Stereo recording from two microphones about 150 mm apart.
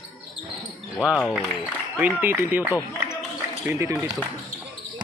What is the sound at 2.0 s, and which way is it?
Speech, 15° right (ahead or behind).